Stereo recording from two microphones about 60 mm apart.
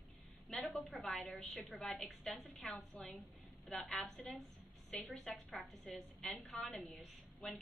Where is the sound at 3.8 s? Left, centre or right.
Left.